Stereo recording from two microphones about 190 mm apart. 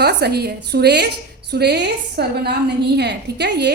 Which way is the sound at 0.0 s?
60° right (ahead or behind).